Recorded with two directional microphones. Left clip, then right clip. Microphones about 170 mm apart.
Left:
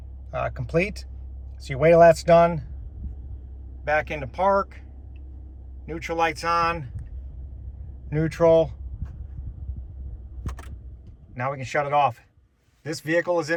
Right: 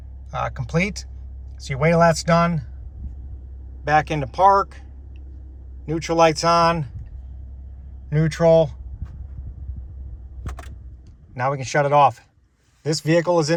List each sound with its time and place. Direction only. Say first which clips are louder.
0.3 s speech: right 2 dB; 5° right (ahead or behind)
3.8 s speech: right 5 dB; 15° right (ahead or behind)
5.8 s speech: right 7 dB; 15° right (ahead or behind)
8.1 s speech: right 2 dB; 5° right (ahead or behind)
11.3 s speech: right 5 dB; 10° right (ahead or behind)